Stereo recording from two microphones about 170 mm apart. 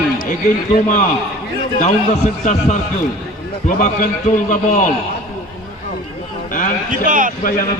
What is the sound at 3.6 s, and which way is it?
A man's voice, 50° left (ahead or behind).